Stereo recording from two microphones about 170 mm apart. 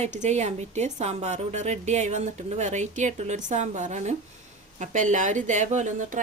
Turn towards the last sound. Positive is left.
turn(degrees=-50)  # may be behind; listen again after turning